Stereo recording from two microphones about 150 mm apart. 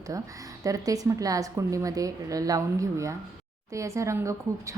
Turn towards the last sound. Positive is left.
turn(degrees=-20)  # may be behind; listen again after turning